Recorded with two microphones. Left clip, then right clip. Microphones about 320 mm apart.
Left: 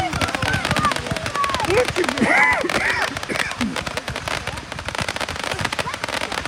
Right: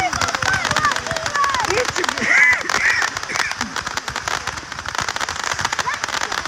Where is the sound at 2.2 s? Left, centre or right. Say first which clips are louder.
Right 3 dB; centre.